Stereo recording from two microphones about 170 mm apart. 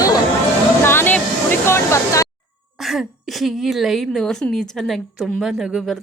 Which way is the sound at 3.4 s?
Centre (ahead or behind).